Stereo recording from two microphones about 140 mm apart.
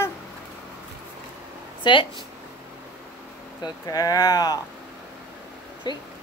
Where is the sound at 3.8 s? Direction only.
25° left (ahead or behind).